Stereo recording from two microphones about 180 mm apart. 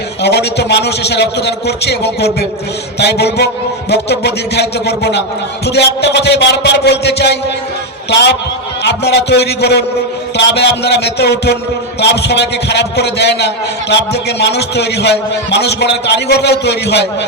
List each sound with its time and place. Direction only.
0.2 s a man's voice: 70° left (ahead or behind)
8.8 s a man's voice: 70° left (ahead or behind)